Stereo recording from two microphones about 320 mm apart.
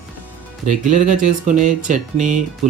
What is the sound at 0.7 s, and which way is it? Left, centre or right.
Speech, right.